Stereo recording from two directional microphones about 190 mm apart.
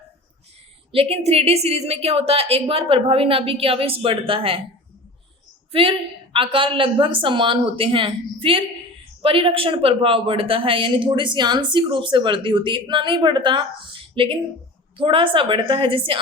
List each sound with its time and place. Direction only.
0.9 s a woman's voice: 30° right (ahead or behind)
6.3 s a woman's voice: 25° right (ahead or behind)